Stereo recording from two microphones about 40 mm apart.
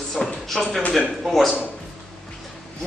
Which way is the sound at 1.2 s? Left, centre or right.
Centre.